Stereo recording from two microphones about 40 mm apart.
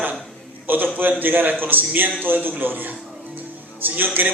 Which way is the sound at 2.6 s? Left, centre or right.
Right.